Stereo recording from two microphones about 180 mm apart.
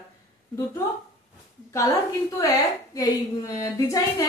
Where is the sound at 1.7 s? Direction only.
15° left (ahead or behind).